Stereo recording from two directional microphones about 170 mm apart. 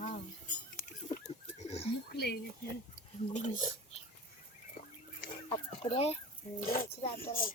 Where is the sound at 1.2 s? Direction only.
40° left (ahead or behind).